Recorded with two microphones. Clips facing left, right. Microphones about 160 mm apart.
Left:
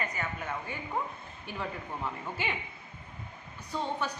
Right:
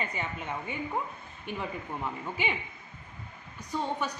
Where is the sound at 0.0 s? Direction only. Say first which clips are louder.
Right 1 dB; 25° right (ahead or behind).